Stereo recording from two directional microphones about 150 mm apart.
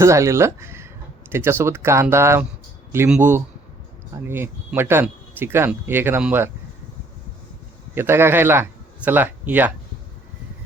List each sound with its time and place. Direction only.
0.0 s speech: 20° right (ahead or behind)
7.9 s speech: 15° right (ahead or behind)